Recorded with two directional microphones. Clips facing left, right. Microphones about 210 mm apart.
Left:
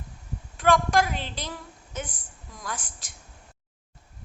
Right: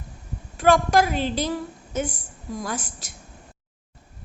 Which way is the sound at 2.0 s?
30° right (ahead or behind).